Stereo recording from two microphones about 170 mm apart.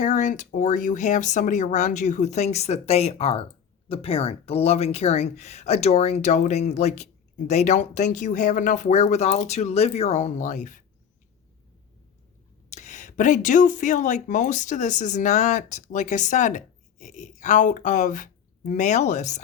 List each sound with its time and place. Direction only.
0.0 s speech: 45° left (ahead or behind)
12.7 s speech: 45° left (ahead or behind)